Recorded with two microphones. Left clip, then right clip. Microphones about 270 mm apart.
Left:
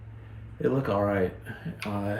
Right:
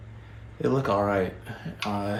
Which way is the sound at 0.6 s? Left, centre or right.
Centre.